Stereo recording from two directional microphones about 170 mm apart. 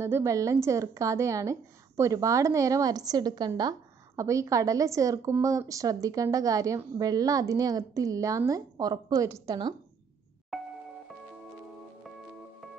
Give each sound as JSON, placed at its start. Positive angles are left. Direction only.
{"t": 0.0, "sound": "a woman's voice", "side_deg": -15}